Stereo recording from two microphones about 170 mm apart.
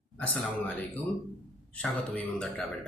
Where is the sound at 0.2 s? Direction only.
10° left (ahead or behind).